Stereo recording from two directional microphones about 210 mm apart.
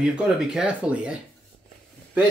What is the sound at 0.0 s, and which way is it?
Speech, 5° right (ahead or behind).